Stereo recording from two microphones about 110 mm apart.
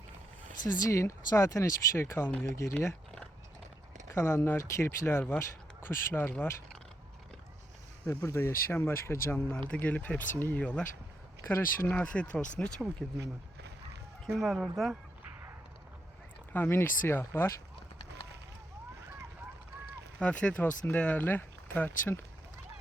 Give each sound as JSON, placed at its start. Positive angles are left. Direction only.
{"t": 0.9, "sound": "speech", "side_deg": 25}
{"t": 2.2, "sound": "speech", "side_deg": 15}
{"t": 4.1, "sound": "speech", "side_deg": 25}
{"t": 8.0, "sound": "speech", "side_deg": 25}
{"t": 14.3, "sound": "speech", "side_deg": 0}
{"t": 16.5, "sound": "speech", "side_deg": 20}
{"t": 20.1, "sound": "speech", "side_deg": 10}